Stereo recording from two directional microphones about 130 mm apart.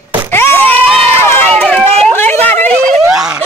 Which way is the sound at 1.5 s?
10° left (ahead or behind).